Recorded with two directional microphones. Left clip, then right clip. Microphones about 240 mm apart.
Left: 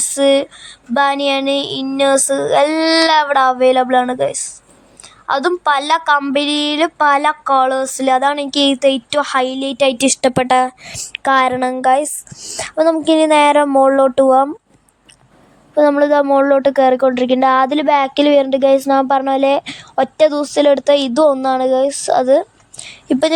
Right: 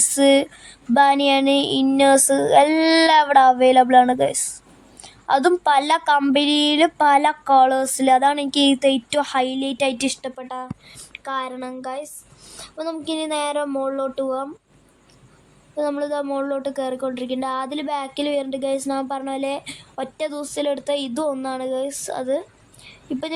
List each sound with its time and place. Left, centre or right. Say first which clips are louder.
0.1 s a woman's voice: left 4 dB; centre
10.2 s speech: left 18 dB; left
11.1 s speech: left 14 dB; left
15.7 s speech: left 12 dB; left